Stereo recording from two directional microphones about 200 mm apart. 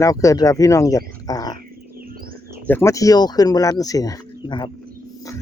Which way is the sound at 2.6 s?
10° left (ahead or behind).